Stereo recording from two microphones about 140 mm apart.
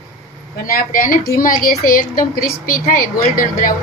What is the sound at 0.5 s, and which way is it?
Speech, 90° left.